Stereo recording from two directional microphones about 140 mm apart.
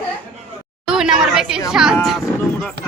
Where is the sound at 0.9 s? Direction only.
5° right (ahead or behind).